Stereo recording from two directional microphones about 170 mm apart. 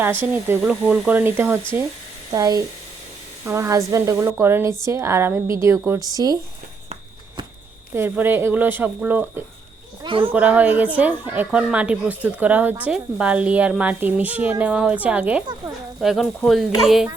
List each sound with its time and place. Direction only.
0.0 s speech: 10° right (ahead or behind)
7.9 s speech: 10° right (ahead or behind)
10.0 s speech: 30° right (ahead or behind)
10.3 s speech: 10° right (ahead or behind)